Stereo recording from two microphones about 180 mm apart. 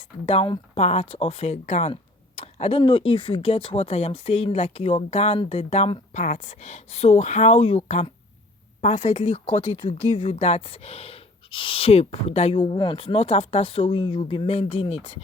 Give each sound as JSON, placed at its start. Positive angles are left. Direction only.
{"t": 0.3, "sound": "speech", "side_deg": 30}